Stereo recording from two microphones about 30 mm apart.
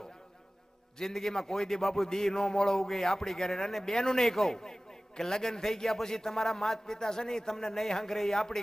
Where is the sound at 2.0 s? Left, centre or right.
Left.